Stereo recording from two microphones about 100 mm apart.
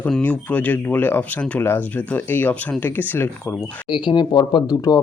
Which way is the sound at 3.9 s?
50° left (ahead or behind).